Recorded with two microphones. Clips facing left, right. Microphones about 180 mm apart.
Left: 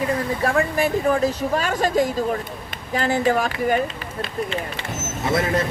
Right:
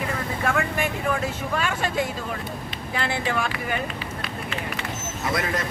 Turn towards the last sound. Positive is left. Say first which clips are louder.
# left 5 dB
turn(degrees=25)  # may be behind; listen again after turning